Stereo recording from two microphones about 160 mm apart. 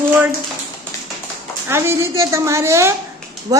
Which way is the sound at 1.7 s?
15° right (ahead or behind).